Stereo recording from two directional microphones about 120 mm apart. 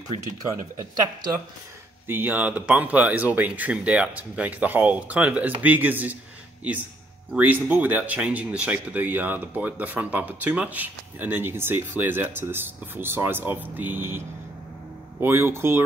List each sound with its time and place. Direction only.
2.0 s speech: 15° right (ahead or behind)
7.3 s speech: 15° right (ahead or behind)